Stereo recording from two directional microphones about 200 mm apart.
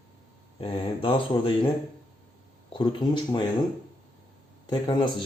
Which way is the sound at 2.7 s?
25° left (ahead or behind).